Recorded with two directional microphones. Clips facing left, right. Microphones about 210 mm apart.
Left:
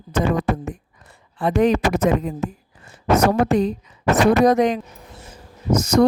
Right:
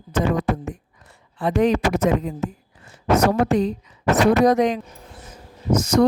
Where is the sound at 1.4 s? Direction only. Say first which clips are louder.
Left 1 dB; 55° left (ahead or behind).